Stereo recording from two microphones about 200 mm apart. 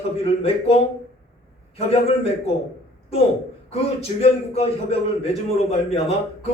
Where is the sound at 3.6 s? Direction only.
30° left (ahead or behind).